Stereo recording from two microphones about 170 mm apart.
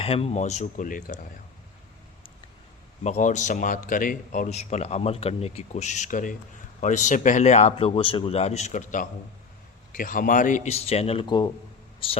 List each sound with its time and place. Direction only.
0.0 s speech: 35° left (ahead or behind); by 1.3 s 50° left (ahead or behind)
3.0 s speech: 45° left (ahead or behind)